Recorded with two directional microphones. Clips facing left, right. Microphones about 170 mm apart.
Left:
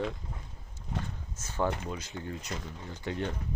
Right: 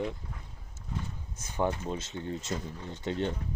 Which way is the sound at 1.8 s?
25° right (ahead or behind).